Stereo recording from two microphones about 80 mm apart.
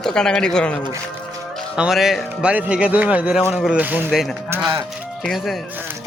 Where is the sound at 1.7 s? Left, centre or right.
Centre.